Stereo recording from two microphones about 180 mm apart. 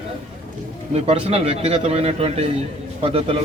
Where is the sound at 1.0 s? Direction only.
35° right (ahead or behind).